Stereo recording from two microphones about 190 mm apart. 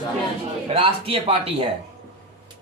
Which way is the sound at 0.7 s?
30° right (ahead or behind).